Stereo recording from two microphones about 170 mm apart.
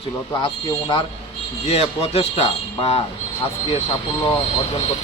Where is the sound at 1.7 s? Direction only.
35° left (ahead or behind).